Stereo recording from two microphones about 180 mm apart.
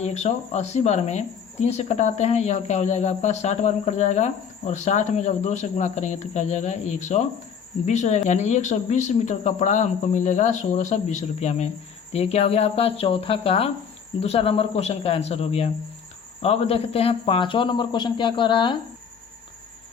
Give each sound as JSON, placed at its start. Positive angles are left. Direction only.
{"t": 0.0, "sound": "a man's voice", "side_deg": 40}